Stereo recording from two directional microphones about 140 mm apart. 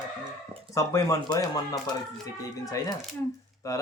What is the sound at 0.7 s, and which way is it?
Speech, 25° left (ahead or behind).